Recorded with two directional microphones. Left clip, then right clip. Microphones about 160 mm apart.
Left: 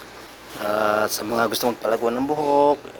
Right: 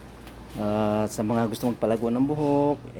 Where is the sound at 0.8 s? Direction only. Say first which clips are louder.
Left 6 dB; 5° right (ahead or behind).